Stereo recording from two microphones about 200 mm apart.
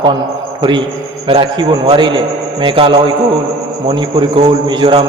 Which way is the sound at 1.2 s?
25° right (ahead or behind).